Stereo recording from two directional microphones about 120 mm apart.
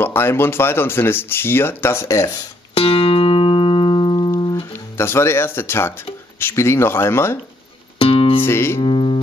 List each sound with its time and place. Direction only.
0.0 s speech: 20° left (ahead or behind)
2.7 s music: 50° left (ahead or behind)
4.9 s speech: 20° left (ahead or behind)
8.0 s music: 50° left (ahead or behind)
8.5 s music: 20° left (ahead or behind)
8.8 s music: 45° left (ahead or behind)